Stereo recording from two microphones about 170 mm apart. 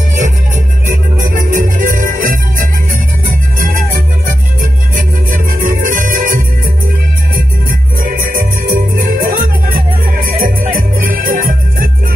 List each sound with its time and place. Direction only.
1.2 s music: 50° right (ahead or behind)
4.9 s music: 55° right (ahead or behind)
8.0 s music: 55° right (ahead or behind)